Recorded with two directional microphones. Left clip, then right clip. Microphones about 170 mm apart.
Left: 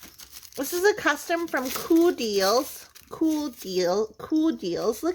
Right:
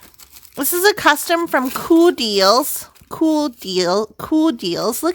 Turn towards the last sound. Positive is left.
turn(degrees=-45)  # may be behind; listen again after turning